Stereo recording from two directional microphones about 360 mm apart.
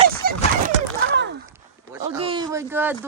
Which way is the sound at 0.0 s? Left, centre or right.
Right.